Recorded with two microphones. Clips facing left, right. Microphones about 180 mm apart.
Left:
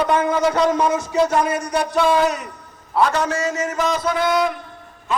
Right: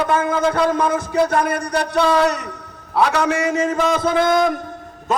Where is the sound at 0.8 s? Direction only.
55° right (ahead or behind).